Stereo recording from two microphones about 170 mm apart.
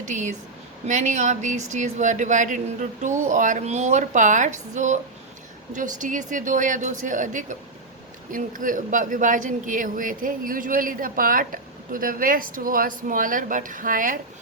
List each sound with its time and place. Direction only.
0.0 s a man's voice: 45° right (ahead or behind)